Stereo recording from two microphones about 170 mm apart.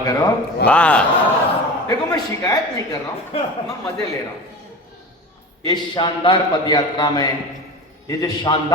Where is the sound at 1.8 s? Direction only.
20° left (ahead or behind).